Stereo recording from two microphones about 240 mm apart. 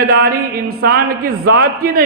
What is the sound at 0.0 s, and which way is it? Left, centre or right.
A man's voice, right.